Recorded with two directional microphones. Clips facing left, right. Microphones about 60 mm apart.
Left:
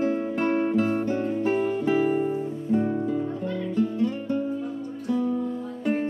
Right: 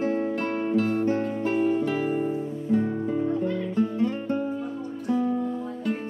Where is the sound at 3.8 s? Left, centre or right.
Right.